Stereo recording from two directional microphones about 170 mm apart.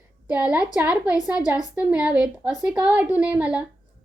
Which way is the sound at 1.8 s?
5° right (ahead or behind).